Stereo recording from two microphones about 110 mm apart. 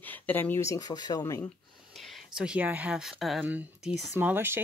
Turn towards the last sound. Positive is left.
turn(degrees=-20)  # may be behind; listen again after turning